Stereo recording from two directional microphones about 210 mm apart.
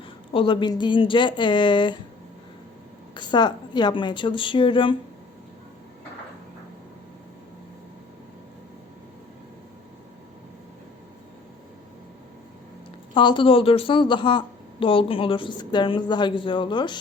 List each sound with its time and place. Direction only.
0.3 s speech: 25° left (ahead or behind)
3.2 s speech: 20° left (ahead or behind)
13.1 s speech: 20° left (ahead or behind)